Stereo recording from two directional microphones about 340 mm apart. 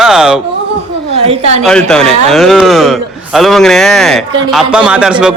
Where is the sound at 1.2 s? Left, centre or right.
Centre.